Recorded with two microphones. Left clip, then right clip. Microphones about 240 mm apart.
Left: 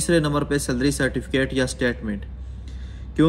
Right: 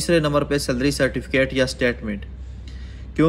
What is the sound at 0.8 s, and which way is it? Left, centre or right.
Speech, right.